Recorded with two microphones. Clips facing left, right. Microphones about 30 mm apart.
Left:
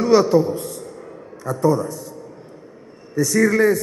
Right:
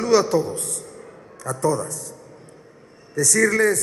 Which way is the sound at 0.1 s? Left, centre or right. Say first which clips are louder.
Left 2 dB; right.